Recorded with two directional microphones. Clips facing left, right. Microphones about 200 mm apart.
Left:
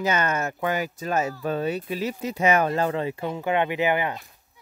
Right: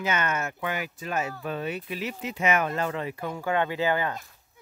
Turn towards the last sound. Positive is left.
turn(degrees=20)  # may be behind; listen again after turning